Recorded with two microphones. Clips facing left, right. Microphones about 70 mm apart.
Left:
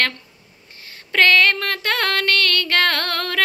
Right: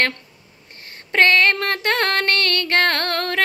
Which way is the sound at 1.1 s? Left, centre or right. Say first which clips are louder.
Even; right.